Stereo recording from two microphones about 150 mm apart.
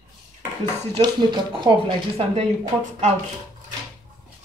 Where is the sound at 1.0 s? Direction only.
30° right (ahead or behind).